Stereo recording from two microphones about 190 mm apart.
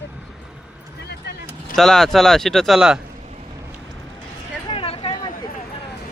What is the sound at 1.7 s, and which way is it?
Speech, centre (ahead or behind).